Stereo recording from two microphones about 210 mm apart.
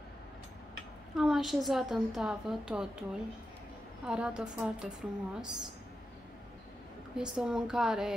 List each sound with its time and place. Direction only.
1.1 s a woman's voice: centre (ahead or behind)
7.2 s a woman's voice: 5° right (ahead or behind)